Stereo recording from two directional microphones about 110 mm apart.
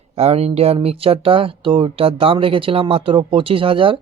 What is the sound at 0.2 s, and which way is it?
Speech, 70° right (ahead or behind).